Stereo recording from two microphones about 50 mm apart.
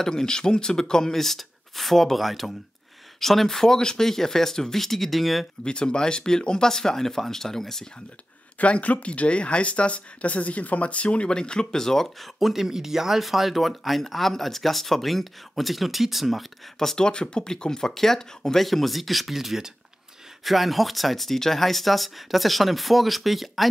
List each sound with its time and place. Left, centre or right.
0.0 s speech: centre
5.6 s speech: centre
8.5 s speech: left; by 12.3 s centre
12.4 s speech: centre
16.7 s speech: centre